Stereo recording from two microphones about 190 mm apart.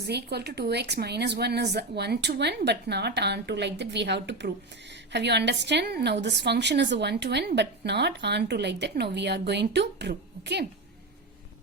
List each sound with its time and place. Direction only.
0.0 s a woman's voice: 60° right (ahead or behind)